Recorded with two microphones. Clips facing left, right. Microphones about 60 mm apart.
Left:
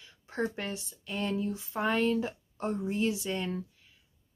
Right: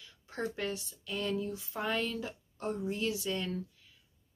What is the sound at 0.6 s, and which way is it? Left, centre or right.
Speech, left.